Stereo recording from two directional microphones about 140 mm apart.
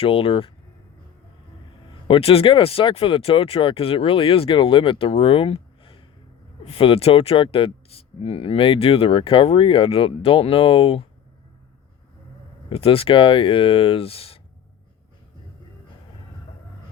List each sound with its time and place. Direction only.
0.0 s speech: 40° left (ahead or behind)
1.9 s speech: 40° left (ahead or behind)
12.6 s speech: 40° left (ahead or behind)